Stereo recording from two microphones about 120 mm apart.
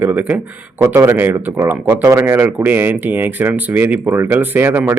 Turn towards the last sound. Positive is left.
turn(degrees=-15)  # may be behind; listen again after turning